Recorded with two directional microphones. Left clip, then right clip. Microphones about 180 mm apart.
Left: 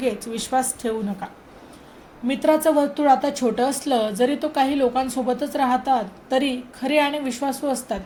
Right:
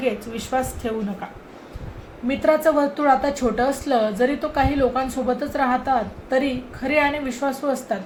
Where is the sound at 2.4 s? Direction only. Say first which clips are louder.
Even; 35° left (ahead or behind).